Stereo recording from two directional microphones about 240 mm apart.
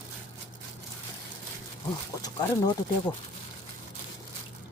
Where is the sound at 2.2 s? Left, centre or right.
Centre.